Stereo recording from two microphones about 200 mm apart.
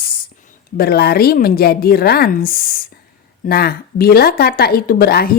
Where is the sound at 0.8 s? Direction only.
50° left (ahead or behind).